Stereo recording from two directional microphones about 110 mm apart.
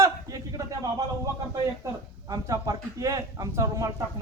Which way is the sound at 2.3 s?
30° right (ahead or behind).